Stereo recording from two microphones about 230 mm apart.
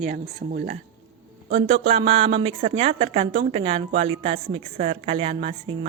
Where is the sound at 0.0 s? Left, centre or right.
Right.